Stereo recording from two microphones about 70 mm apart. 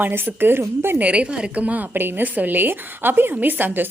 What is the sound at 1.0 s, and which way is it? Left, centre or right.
A woman's voice, centre.